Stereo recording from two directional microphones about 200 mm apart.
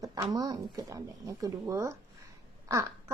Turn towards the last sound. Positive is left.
turn(degrees=-15)  # may be behind; listen again after turning